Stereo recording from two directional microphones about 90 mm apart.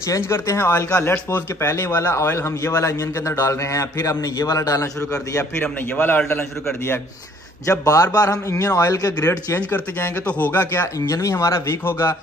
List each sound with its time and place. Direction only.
0.1 s a man's voice: 30° left (ahead or behind)
5.6 s speech: 20° left (ahead or behind)
7.6 s a man's voice: 40° left (ahead or behind)
9.7 s speech: 20° left (ahead or behind)
11.0 s a man's voice: 35° left (ahead or behind)